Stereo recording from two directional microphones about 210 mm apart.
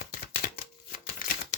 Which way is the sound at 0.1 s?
45° left (ahead or behind).